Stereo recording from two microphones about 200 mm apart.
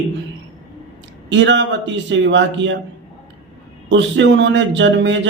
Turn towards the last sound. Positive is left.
turn(degrees=-65)  # may be behind; listen again after turning